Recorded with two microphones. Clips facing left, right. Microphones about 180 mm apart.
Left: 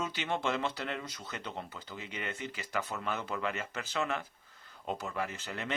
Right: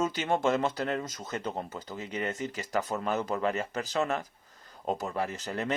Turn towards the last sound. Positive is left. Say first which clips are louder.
# right 6 dB
turn(degrees=-40)  # may be behind; listen again after turning